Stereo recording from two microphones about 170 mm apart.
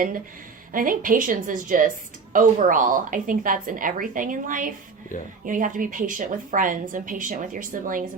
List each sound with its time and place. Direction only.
0.7 s a woman's voice: 55° right (ahead or behind)